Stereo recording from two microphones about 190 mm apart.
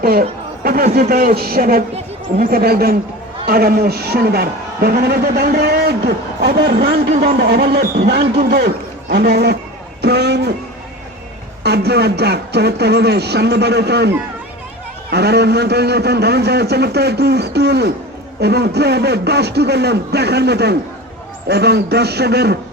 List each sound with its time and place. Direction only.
0.0 s a sound: 50° right (ahead or behind)
0.9 s a man's voice: 50° right (ahead or behind)
11.6 s a man's voice: 60° right (ahead or behind)
15.1 s a man's voice: 60° right (ahead or behind)